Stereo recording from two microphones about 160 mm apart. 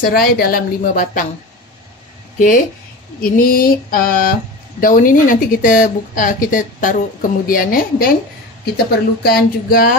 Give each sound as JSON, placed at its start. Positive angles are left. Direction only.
{"t": 0.0, "sound": "speech", "side_deg": 65}
{"t": 2.3, "sound": "speech", "side_deg": 60}